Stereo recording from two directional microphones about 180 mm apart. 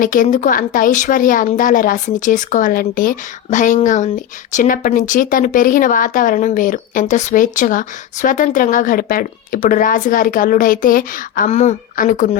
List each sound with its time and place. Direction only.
0.0 s a woman's voice: 45° left (ahead or behind)
11.4 s a woman's voice: 40° left (ahead or behind)